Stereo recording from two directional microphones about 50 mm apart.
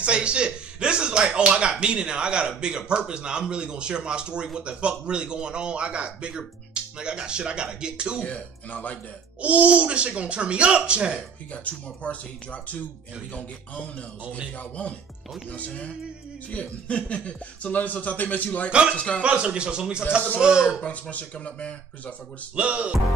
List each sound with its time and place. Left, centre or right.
0.0 s speech: right
8.2 s speech: left
9.4 s speech: right
11.5 s speech: left
14.3 s speech: left
18.7 s speech: right
18.9 s speech: left
19.2 s speech: right
20.8 s speech: left
22.6 s speech: right